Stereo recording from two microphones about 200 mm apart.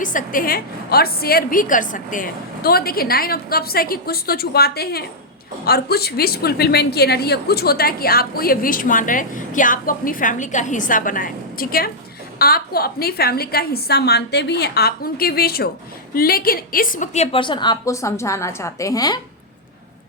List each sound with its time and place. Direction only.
0.0 s a woman's voice: 40° left (ahead or behind); by 19.2 s 20° left (ahead or behind)